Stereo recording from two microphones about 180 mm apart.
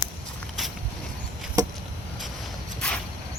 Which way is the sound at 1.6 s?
20° right (ahead or behind).